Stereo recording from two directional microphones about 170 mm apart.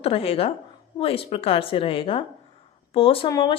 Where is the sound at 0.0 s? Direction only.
35° left (ahead or behind).